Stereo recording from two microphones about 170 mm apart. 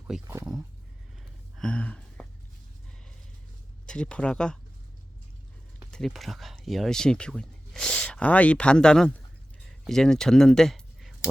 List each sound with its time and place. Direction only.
0.1 s speech: 5° right (ahead or behind)
1.5 s a sound: 5° left (ahead or behind)
3.8 s speech: 5° left (ahead or behind)
5.9 s speech: centre (ahead or behind)